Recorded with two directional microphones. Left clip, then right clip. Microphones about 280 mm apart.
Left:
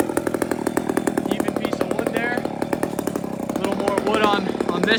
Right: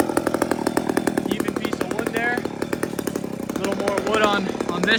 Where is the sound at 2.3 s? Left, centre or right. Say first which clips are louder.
Left 1 dB; left.